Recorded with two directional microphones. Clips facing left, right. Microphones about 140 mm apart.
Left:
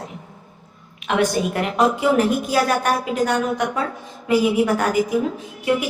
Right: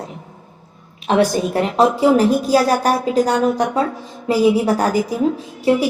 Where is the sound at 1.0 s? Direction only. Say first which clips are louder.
Right 4 dB; 35° right (ahead or behind).